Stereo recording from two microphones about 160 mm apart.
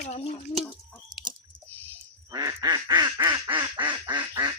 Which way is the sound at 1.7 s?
10° left (ahead or behind).